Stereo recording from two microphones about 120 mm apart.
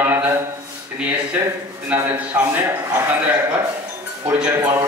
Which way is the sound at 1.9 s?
15° right (ahead or behind).